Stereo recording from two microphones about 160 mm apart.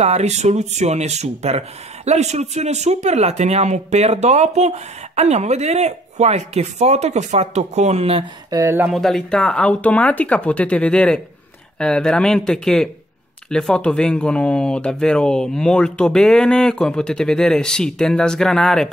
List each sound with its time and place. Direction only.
0.0 s speech: 45° right (ahead or behind)
8.5 s speech: 20° right (ahead or behind)
8.9 s speech: 5° left (ahead or behind)